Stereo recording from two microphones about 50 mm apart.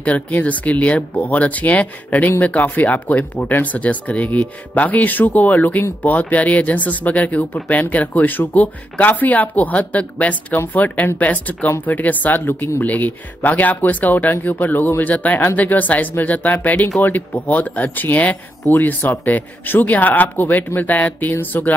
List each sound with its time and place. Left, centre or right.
0.0 s speech: left
12.8 s speech: left